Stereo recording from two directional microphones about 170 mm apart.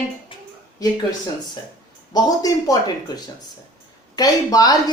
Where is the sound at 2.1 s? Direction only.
20° left (ahead or behind).